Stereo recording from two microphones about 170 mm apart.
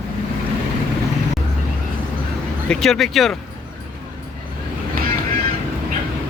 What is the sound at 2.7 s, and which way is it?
Speech, centre (ahead or behind).